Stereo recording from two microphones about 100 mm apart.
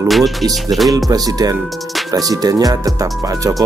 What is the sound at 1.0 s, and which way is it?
Speech, 35° right (ahead or behind).